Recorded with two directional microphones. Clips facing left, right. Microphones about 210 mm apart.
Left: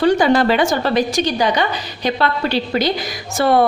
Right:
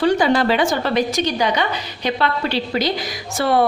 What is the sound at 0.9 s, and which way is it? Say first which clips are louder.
A woman's voice: left 2 dB; 35° left (ahead or behind).